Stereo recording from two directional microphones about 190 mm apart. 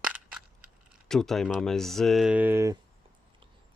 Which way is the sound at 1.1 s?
Centre (ahead or behind).